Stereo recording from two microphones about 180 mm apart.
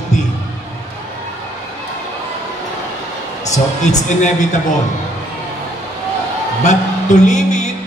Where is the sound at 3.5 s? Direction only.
40° left (ahead or behind).